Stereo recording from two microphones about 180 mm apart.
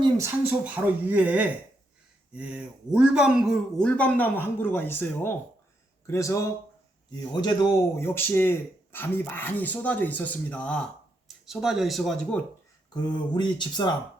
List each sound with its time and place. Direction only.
0.0 s speech: 15° right (ahead or behind); by 12.4 s 5° left (ahead or behind)
12.9 s speech: 25° left (ahead or behind)